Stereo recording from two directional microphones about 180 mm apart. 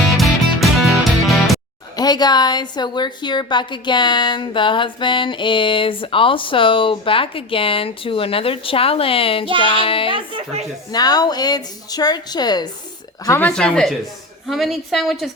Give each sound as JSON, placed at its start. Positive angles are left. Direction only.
{"t": 0.2, "sound": "music", "side_deg": 0}
{"t": 2.0, "sound": "a woman's voice", "side_deg": 20}
{"t": 10.1, "sound": "speech", "side_deg": -30}
{"t": 10.9, "sound": "a woman's voice", "side_deg": 20}
{"t": 13.5, "sound": "a woman's voice", "side_deg": 5}